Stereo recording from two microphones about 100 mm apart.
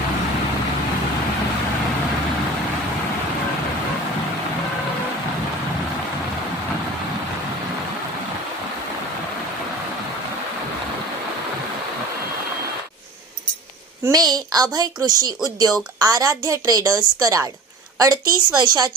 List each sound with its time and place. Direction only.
14.1 s a woman's voice: 40° right (ahead or behind)